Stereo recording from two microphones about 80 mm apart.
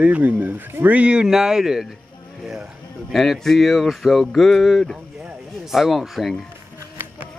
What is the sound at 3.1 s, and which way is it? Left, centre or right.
Speech, centre.